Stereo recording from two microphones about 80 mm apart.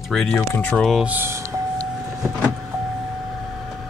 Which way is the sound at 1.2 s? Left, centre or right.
Right.